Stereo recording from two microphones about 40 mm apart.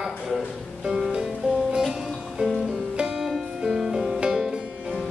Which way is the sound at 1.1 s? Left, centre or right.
Centre.